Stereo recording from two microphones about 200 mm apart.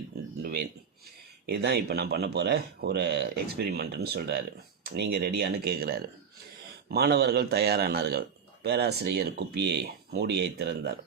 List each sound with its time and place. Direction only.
1.5 s speech: 55° right (ahead or behind)